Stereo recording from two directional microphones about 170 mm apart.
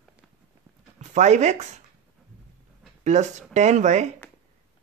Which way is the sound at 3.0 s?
45° right (ahead or behind).